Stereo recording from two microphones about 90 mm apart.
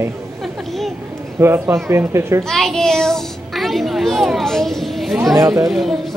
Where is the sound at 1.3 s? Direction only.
30° right (ahead or behind).